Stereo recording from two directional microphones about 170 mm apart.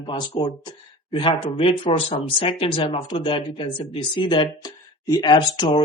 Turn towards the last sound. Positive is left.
turn(degrees=30)  # may be behind; listen again after turning